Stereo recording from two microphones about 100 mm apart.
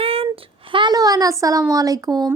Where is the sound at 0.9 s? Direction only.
40° right (ahead or behind).